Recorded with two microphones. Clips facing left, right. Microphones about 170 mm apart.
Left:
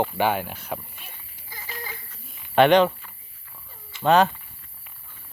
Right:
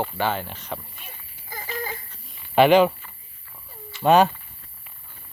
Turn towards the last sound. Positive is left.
turn(degrees=-10)  # may be behind; listen again after turning